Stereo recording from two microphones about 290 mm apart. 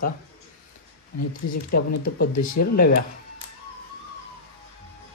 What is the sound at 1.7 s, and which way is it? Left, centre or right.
Speech, left.